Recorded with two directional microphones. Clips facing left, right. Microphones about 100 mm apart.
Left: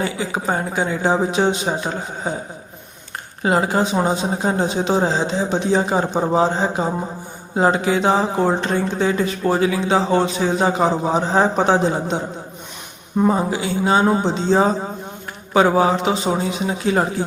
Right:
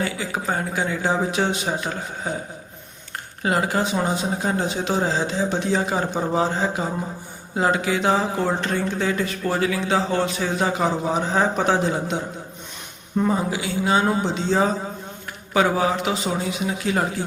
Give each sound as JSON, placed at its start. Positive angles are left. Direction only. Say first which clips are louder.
{"t": 0.0, "sound": "speech", "louder": "left 3 dB", "side_deg": 25}
{"t": 3.4, "sound": "speech", "louder": "left 4 dB", "side_deg": 25}
{"t": 13.2, "sound": "speech", "louder": "left 5 dB", "side_deg": 30}